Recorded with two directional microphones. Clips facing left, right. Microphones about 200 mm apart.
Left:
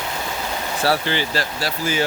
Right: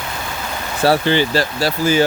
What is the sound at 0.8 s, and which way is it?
Speech, 25° right (ahead or behind).